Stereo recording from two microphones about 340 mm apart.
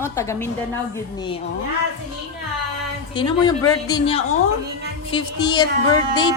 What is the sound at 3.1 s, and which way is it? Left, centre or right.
A woman's voice, centre.